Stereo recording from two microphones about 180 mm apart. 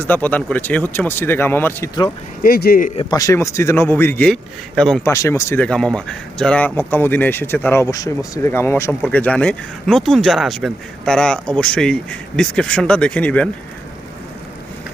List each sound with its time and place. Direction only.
0.0 s speech: 10° left (ahead or behind)
2.4 s speech: 55° left (ahead or behind)
3.0 s speech: 20° left (ahead or behind); by 5.0 s 5° left (ahead or behind)
5.0 s speech: 15° left (ahead or behind)